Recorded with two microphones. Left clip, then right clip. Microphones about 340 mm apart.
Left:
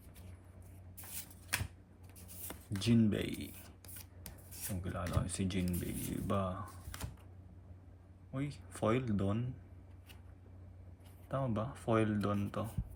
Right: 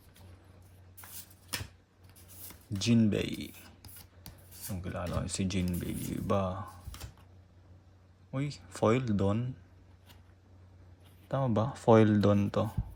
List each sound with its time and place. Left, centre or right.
2.7 s a sound: centre
4.7 s speech: centre
8.3 s speech: centre
11.3 s speech: centre